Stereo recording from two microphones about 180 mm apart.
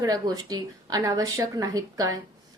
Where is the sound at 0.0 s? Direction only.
20° right (ahead or behind).